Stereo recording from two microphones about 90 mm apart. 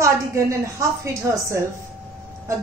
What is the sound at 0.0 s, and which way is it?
A woman's voice, 35° right (ahead or behind).